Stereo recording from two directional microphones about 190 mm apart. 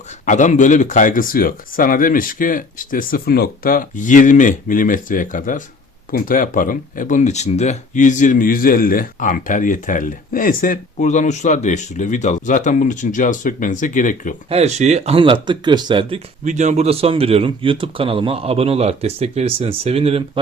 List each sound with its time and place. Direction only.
0.3 s speech: 40° left (ahead or behind)
14.5 s speech: 35° right (ahead or behind)